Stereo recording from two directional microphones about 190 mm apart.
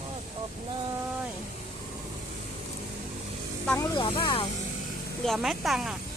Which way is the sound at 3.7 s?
15° left (ahead or behind).